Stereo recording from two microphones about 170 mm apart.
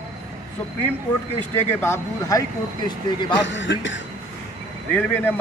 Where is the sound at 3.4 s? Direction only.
90° left.